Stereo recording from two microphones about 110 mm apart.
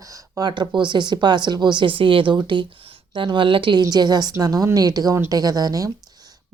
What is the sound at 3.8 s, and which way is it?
Speech, 40° right (ahead or behind).